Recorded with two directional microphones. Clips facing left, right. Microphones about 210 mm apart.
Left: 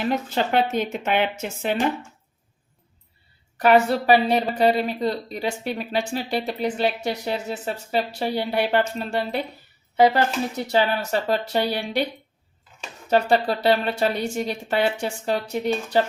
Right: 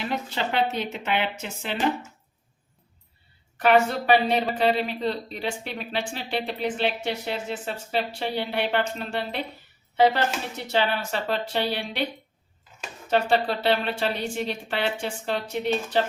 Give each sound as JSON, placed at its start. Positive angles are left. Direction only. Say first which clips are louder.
{"t": 0.3, "sound": "speech", "louder": "left 4 dB", "side_deg": 45}
{"t": 3.6, "sound": "speech", "louder": "left 3 dB", "side_deg": 35}
{"t": 10.6, "sound": "speech", "louder": "left 2 dB", "side_deg": 40}
{"t": 13.1, "sound": "speech", "louder": "left 3 dB", "side_deg": 40}